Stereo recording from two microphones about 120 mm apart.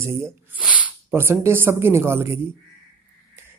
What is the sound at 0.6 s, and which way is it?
Speech, 10° right (ahead or behind).